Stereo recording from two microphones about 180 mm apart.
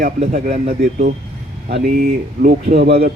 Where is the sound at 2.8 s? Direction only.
60° right (ahead or behind).